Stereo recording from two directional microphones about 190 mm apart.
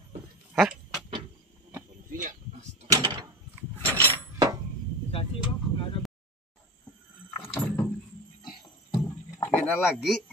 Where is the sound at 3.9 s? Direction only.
15° right (ahead or behind).